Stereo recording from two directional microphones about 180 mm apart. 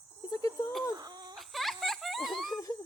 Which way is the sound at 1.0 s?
20° right (ahead or behind).